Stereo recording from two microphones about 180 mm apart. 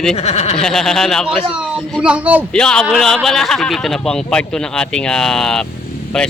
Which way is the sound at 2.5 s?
5° left (ahead or behind).